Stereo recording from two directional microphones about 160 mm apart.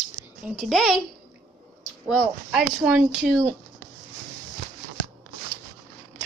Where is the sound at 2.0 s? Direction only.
5° right (ahead or behind).